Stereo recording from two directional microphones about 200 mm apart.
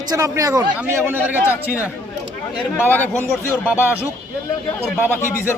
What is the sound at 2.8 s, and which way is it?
Speech, 10° left (ahead or behind).